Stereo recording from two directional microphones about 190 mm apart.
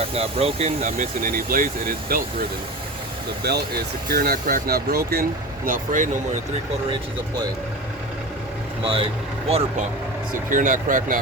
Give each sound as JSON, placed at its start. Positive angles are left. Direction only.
{"t": 0.0, "sound": "speech", "side_deg": -30}
{"t": 3.4, "sound": "speech", "side_deg": -60}
{"t": 8.8, "sound": "speech", "side_deg": -30}
{"t": 10.5, "sound": "speech", "side_deg": -45}